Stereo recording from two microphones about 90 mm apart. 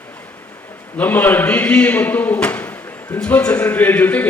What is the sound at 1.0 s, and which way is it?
A man's voice, 20° left (ahead or behind).